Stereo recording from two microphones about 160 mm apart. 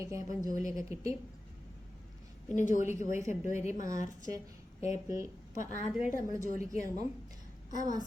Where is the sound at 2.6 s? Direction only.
50° left (ahead or behind).